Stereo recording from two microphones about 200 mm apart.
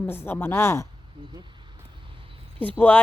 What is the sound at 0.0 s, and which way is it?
Speech, 10° left (ahead or behind).